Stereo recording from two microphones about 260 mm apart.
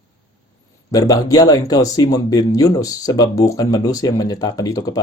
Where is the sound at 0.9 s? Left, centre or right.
Centre.